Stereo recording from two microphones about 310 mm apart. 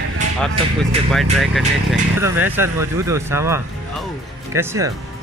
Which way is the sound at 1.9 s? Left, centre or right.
Centre.